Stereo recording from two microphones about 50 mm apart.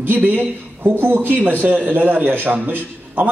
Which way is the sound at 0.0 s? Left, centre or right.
Right.